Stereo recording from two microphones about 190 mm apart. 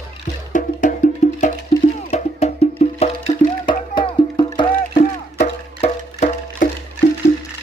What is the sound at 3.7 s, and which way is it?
Music, 25° left (ahead or behind).